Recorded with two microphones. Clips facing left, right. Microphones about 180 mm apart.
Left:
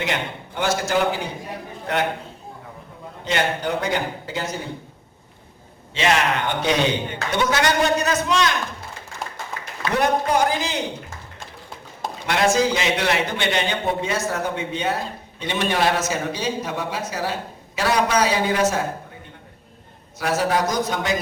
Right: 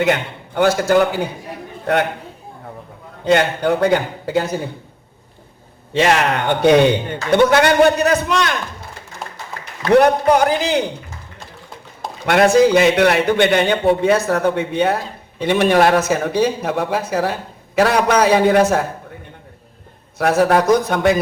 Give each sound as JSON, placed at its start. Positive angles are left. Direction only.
{"t": 0.0, "sound": "a man's voice", "side_deg": -55}
{"t": 3.2, "sound": "a man's voice", "side_deg": -55}
{"t": 5.9, "sound": "a man's voice", "side_deg": -60}
{"t": 9.9, "sound": "a man's voice", "side_deg": -60}
{"t": 12.2, "sound": "a man's voice", "side_deg": -60}
{"t": 20.1, "sound": "a man's voice", "side_deg": -60}